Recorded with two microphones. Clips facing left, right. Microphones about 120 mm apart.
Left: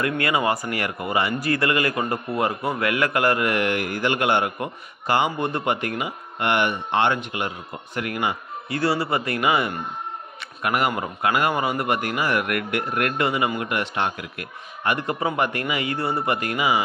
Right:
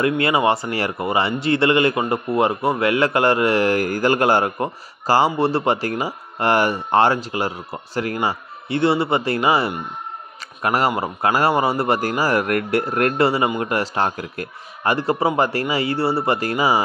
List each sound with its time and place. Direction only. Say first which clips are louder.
0.0 s a man's voice: right 5 dB; 25° right (ahead or behind)